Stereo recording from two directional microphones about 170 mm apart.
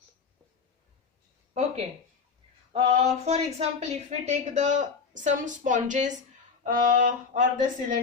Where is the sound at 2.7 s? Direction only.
35° right (ahead or behind).